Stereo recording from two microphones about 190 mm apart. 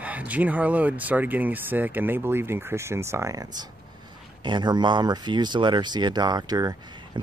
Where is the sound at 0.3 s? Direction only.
10° right (ahead or behind).